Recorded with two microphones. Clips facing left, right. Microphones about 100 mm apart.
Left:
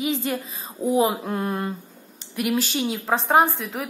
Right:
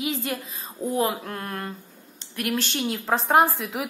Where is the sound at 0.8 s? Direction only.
15° left (ahead or behind).